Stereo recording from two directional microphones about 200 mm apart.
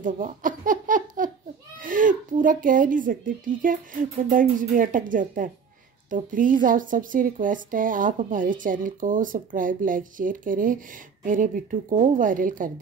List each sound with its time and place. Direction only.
0.0 s laughter: 40° right (ahead or behind)
1.8 s speech: 45° right (ahead or behind)